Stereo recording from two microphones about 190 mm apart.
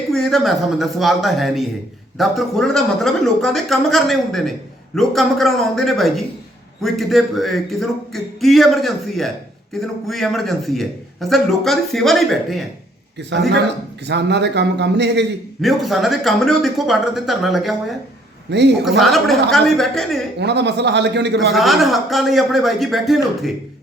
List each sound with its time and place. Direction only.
0.1 s a man's voice: centre (ahead or behind)
14.1 s a man's voice: 65° right (ahead or behind)
15.6 s a man's voice: centre (ahead or behind)
18.5 s a man's voice: 65° right (ahead or behind)
18.9 s a man's voice: centre (ahead or behind)
20.4 s a man's voice: 65° right (ahead or behind)
21.5 s a man's voice: centre (ahead or behind)